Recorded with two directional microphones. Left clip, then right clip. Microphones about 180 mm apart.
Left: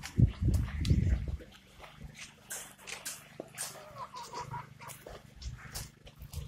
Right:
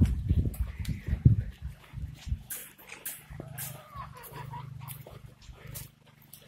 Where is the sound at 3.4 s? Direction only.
45° left (ahead or behind).